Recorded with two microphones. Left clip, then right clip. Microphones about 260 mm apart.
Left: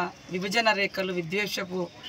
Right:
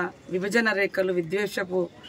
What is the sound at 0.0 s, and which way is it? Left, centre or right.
A man's voice, centre.